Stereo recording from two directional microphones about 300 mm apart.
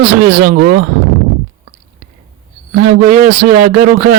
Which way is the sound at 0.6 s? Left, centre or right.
Right.